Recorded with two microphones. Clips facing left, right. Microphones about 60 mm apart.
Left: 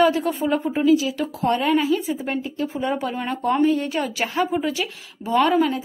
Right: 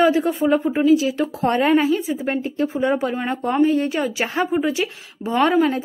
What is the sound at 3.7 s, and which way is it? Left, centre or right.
A woman's voice, right.